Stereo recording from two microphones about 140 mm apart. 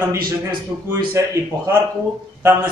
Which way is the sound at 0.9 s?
20° right (ahead or behind).